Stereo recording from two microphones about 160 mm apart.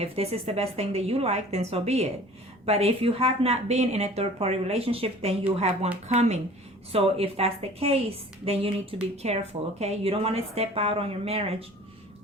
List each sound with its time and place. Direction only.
0.0 s a woman's voice: 40° right (ahead or behind)